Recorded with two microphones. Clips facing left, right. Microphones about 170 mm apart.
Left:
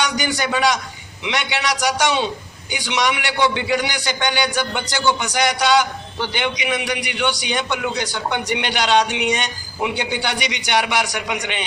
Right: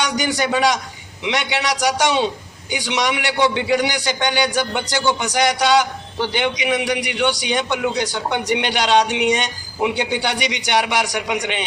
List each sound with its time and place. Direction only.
0.0 s a man's voice: 35° right (ahead or behind)